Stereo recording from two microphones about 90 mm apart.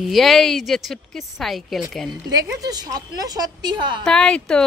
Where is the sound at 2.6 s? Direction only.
45° right (ahead or behind).